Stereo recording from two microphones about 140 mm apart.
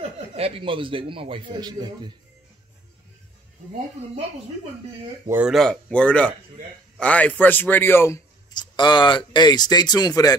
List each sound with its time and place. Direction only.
0.4 s a man's voice: 40° right (ahead or behind)
5.5 s a man's voice: 5° left (ahead or behind)
8.5 s speech: 35° left (ahead or behind)